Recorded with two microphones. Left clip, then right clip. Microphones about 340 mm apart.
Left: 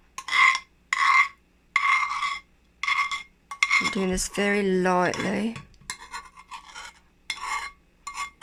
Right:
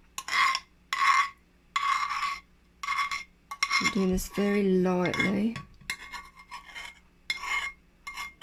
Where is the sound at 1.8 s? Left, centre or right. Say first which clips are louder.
Left 5 dB; centre.